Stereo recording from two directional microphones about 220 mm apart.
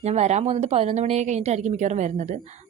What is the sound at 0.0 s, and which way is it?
Speech, 30° right (ahead or behind).